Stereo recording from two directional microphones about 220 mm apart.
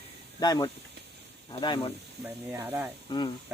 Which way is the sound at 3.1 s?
20° left (ahead or behind).